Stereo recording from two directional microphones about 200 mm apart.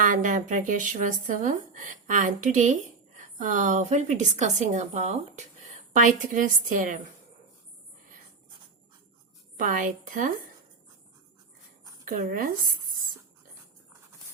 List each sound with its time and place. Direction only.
0.0 s a woman's voice: 40° right (ahead or behind)
9.6 s a woman's voice: 40° right (ahead or behind)
12.0 s speech: 45° right (ahead or behind)